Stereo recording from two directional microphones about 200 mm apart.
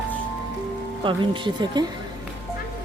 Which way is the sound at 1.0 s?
25° right (ahead or behind).